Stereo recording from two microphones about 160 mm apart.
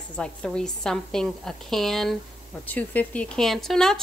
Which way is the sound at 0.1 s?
5° left (ahead or behind).